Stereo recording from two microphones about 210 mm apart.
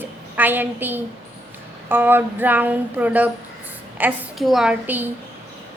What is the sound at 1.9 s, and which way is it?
A woman's voice, 10° right (ahead or behind).